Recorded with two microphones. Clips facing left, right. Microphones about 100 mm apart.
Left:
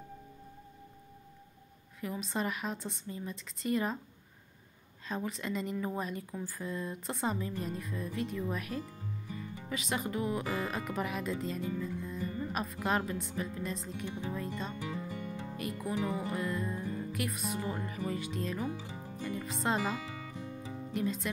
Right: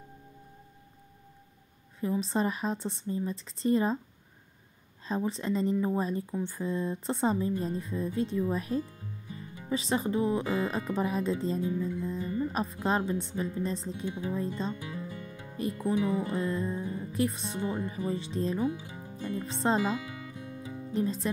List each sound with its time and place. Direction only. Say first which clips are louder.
2.0 s speech: right 7 dB; 30° right (ahead or behind)
5.0 s speech: right 6 dB; 30° right (ahead or behind)
20.4 s music: right 3 dB; 30° left (ahead or behind)
20.9 s speech: right 4 dB; 35° right (ahead or behind)